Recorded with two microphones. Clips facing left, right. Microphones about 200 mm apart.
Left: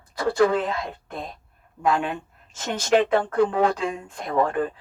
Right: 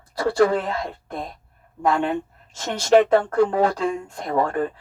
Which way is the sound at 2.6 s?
35° right (ahead or behind).